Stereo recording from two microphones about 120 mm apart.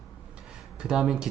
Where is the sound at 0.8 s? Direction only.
5° right (ahead or behind).